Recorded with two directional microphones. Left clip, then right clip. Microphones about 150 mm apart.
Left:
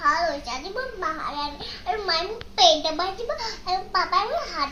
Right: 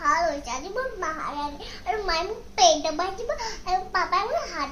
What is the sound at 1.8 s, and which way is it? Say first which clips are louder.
A child's voice: left 1 dB; 10° right (ahead or behind).